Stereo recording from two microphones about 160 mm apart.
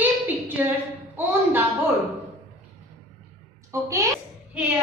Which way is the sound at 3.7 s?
20° right (ahead or behind).